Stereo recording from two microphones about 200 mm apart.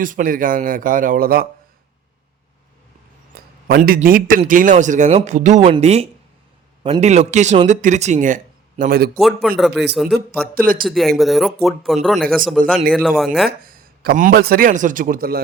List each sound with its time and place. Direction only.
0.0 s speech: 45° right (ahead or behind)
3.3 s a sound: 50° right (ahead or behind)
3.7 s a man's voice: 45° right (ahead or behind)
8.8 s speech: 50° right (ahead or behind)
9.1 s speech: centre (ahead or behind)
10.5 s speech: 45° right (ahead or behind)
10.8 s speech: centre (ahead or behind)
13.6 s speech: 45° right (ahead or behind)